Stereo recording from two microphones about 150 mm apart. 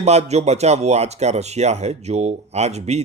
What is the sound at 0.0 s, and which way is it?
Speech, 45° right (ahead or behind).